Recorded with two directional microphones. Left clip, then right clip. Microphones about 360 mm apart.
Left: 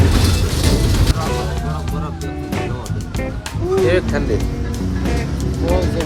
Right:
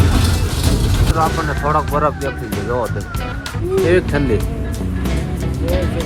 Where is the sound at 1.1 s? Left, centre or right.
Centre.